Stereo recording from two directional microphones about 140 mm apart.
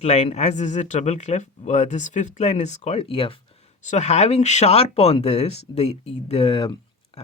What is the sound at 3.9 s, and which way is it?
Speech, 55° left (ahead or behind).